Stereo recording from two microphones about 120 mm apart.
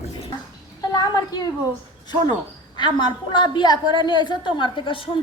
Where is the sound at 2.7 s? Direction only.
40° left (ahead or behind).